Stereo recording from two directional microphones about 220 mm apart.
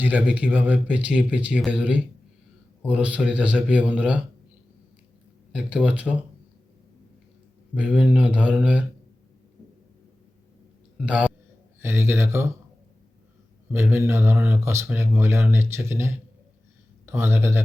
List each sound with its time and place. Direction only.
0.0 s speech: 5° right (ahead or behind)
5.5 s speech: 5° right (ahead or behind)
7.8 s speech: 5° right (ahead or behind)
10.9 s a man's voice: 5° right (ahead or behind)
13.7 s speech: 10° right (ahead or behind)